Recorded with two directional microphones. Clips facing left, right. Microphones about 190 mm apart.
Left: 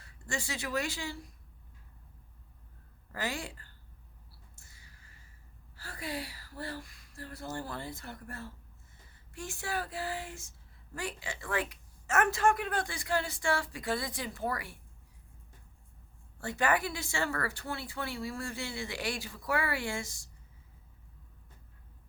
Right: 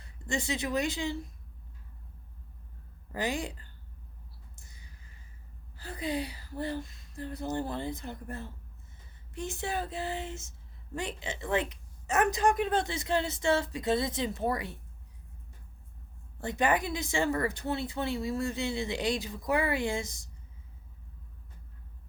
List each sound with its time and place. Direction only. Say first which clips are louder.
0.0 s a woman's voice: right 5 dB; 20° right (ahead or behind)
3.1 s a woman's voice: right 5 dB; 20° right (ahead or behind)
4.5 s a sound: right 4 dB; 20° right (ahead or behind)
5.7 s speech: right 6 dB; 20° right (ahead or behind)
16.4 s speech: right 2 dB; 20° right (ahead or behind)